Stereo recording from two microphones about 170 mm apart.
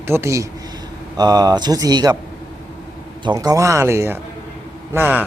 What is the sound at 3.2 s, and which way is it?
Speech, 25° right (ahead or behind).